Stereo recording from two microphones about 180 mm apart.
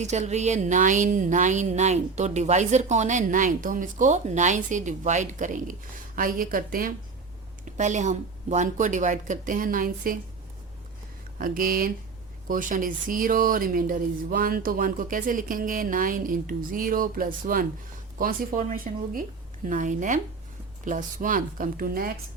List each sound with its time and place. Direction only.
0.0 s a woman's voice: 40° right (ahead or behind)
11.3 s a woman's voice: 50° right (ahead or behind)